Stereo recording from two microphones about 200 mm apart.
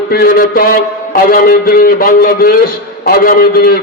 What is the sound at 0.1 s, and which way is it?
A man's voice, 50° left (ahead or behind).